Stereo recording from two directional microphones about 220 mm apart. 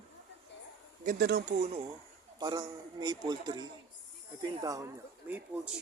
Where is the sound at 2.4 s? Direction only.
20° right (ahead or behind).